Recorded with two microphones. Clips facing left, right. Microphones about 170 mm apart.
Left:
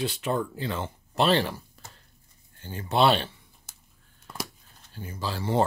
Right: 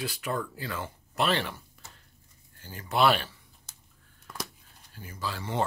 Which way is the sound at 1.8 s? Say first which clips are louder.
Left 3 dB; 35° left (ahead or behind).